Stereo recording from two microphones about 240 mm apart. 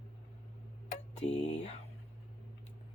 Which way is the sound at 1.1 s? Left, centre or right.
Left.